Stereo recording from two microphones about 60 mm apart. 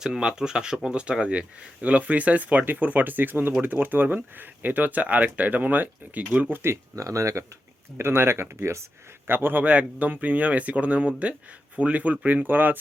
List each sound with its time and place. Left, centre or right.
0.0 s speech: centre
6.9 s speech: right
7.9 s speech: right
9.2 s speech: right